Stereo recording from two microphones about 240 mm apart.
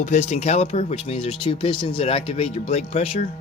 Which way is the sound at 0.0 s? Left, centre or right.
Left.